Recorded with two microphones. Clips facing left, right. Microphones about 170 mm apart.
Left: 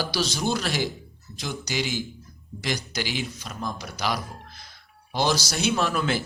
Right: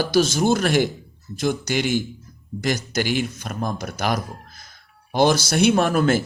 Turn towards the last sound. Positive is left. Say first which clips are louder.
# right 7 dB
turn(degrees=-45)  # may be behind; listen again after turning